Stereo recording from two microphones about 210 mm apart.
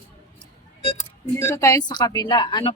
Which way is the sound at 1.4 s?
15° left (ahead or behind).